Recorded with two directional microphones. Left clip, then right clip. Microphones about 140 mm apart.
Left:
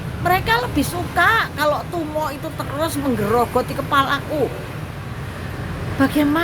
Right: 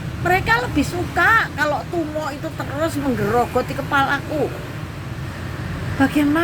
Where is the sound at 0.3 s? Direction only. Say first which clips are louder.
Even; 25° left (ahead or behind).